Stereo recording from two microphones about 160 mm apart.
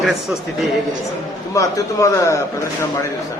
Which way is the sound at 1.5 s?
20° left (ahead or behind).